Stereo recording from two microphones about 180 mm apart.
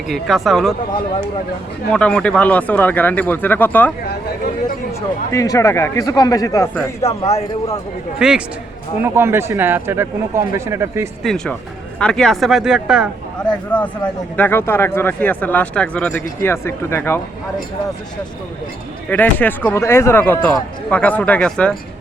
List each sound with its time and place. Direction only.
0.1 s speech: centre (ahead or behind)
1.9 s speech: 5° left (ahead or behind)
4.9 s speech: 15° left (ahead or behind)
7.0 s a man's voice: 35° left (ahead or behind)
8.2 s speech: 5° right (ahead or behind)
11.2 s speech: centre (ahead or behind)
13.7 s speech: 10° left (ahead or behind)
19.1 s speech: 10° left (ahead or behind)